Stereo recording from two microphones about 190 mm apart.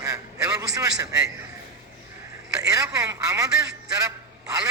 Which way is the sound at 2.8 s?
20° right (ahead or behind).